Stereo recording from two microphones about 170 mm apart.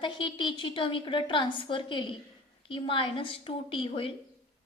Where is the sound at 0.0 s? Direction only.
30° left (ahead or behind).